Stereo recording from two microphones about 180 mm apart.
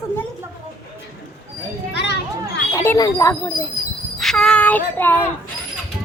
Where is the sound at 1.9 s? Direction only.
70° left (ahead or behind).